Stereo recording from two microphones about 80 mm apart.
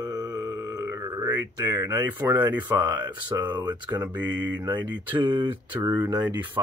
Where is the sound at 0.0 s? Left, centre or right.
Right.